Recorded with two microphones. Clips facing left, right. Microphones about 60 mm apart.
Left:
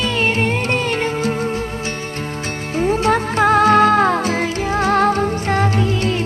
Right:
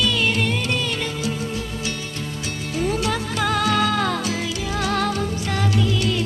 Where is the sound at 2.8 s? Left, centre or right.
Left.